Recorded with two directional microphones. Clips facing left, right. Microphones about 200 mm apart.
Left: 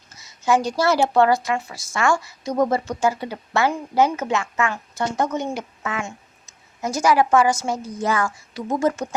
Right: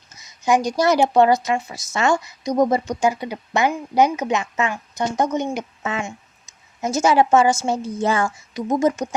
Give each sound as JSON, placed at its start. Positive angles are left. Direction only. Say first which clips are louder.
{"t": 0.1, "sound": "a woman's voice", "louder": "right 1 dB", "side_deg": -20}